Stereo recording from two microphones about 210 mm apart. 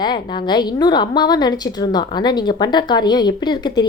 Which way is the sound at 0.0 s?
20° left (ahead or behind).